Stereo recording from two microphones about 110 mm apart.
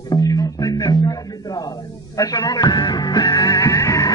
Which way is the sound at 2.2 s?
35° left (ahead or behind).